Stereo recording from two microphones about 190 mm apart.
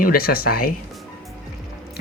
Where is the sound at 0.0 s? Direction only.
50° left (ahead or behind).